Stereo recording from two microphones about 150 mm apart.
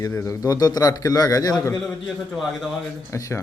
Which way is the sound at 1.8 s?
Centre (ahead or behind).